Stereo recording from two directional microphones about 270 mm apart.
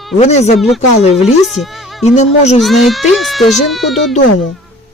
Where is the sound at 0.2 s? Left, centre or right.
Left.